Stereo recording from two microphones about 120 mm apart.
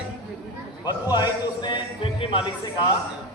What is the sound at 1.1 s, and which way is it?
Speech, 35° left (ahead or behind).